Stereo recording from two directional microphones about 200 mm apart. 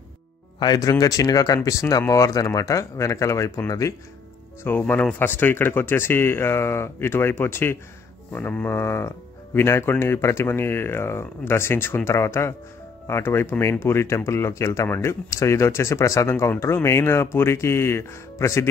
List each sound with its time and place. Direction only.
0.6 s speech: 20° left (ahead or behind)